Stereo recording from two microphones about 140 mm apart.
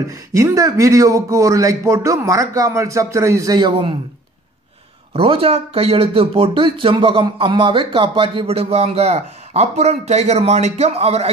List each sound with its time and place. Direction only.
0.1 s speech: 25° right (ahead or behind)
5.1 s speech: 40° right (ahead or behind)